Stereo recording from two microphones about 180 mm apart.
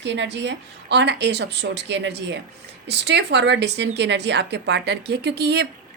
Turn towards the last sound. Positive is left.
turn(degrees=-65)  # may be behind; listen again after turning